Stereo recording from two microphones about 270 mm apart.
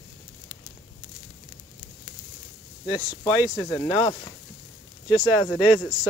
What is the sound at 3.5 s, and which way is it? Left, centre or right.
Speech, centre.